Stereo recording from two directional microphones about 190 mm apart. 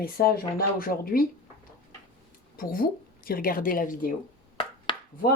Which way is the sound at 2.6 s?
50° left (ahead or behind).